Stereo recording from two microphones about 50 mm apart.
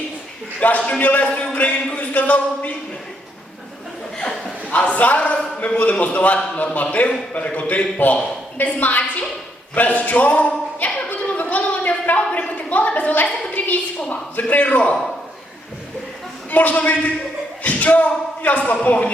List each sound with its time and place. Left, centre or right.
0.9 s a woman's voice: left
4.7 s a woman's voice: left
10.8 s a sound: left
14.1 s speech: left
16.5 s speech: left